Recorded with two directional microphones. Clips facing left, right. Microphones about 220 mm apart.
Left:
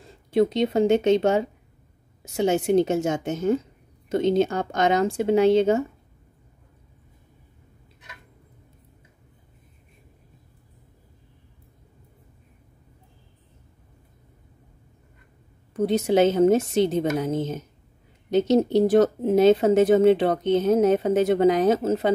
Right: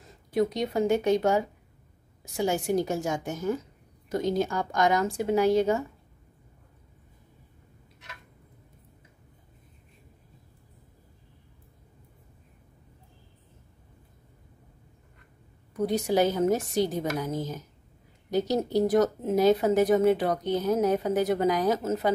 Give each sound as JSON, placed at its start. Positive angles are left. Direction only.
{"t": 0.0, "sound": "speech", "side_deg": 25}
{"t": 15.7, "sound": "speech", "side_deg": 25}